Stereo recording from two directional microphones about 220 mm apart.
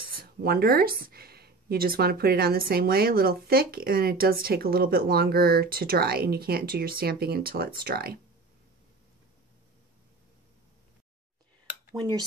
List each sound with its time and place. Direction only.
0.2 s speech: 45° right (ahead or behind)
11.9 s speech: 20° right (ahead or behind)